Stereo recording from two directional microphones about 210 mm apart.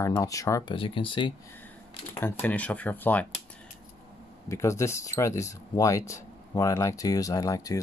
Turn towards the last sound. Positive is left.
turn(degrees=15)  # may be behind; listen again after turning